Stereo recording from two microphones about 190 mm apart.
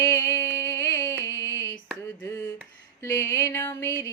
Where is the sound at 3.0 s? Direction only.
15° left (ahead or behind).